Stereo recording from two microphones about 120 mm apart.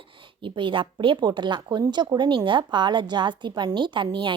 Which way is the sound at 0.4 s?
45° right (ahead or behind).